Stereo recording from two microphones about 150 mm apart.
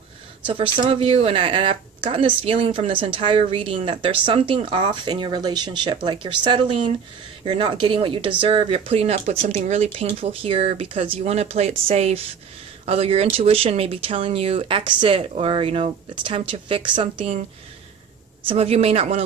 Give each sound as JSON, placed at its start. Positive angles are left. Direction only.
{"t": 0.5, "sound": "speech", "side_deg": -35}
{"t": 18.5, "sound": "speech", "side_deg": -40}